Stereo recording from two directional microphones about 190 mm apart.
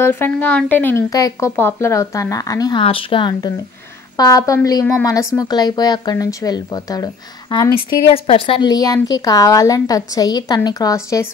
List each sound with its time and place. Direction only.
0.0 s a woman's voice: 10° left (ahead or behind)